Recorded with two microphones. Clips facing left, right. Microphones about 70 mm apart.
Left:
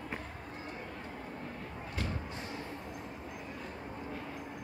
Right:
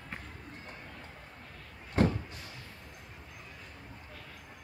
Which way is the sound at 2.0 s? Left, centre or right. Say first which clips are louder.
Right 12 dB; right.